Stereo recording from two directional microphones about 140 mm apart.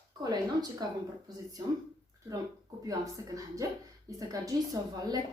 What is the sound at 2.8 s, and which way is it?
A woman's voice, 25° right (ahead or behind).